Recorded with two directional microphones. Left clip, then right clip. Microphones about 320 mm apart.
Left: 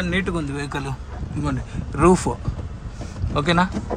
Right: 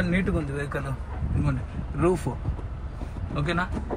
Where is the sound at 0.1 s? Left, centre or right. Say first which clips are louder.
Left 4 dB; centre.